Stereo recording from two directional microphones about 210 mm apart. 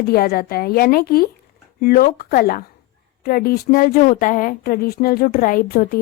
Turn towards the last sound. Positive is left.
turn(degrees=45)  # may be behind; listen again after turning